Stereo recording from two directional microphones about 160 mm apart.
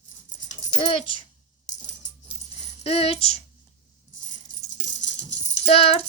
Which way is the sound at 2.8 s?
40° left (ahead or behind).